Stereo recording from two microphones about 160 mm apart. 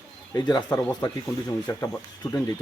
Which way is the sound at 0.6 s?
10° left (ahead or behind).